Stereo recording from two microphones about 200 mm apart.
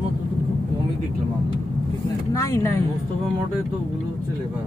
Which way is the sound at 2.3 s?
15° left (ahead or behind).